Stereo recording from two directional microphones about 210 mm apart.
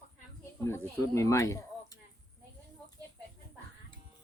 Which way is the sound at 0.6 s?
10° left (ahead or behind).